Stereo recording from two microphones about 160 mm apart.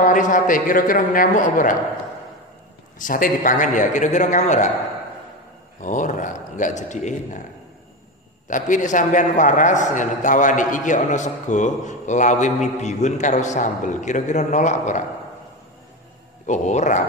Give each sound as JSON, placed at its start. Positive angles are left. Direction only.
{"t": 0.0, "sound": "a man's voice", "side_deg": 55}
{"t": 3.0, "sound": "a man's voice", "side_deg": 55}
{"t": 5.8, "sound": "a man's voice", "side_deg": 50}
{"t": 8.5, "sound": "a man's voice", "side_deg": 55}
{"t": 16.4, "sound": "a man's voice", "side_deg": 50}